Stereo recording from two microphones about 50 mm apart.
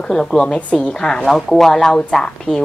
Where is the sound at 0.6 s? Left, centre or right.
Left.